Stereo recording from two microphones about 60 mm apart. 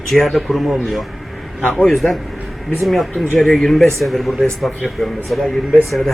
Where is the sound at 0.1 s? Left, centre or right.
Centre.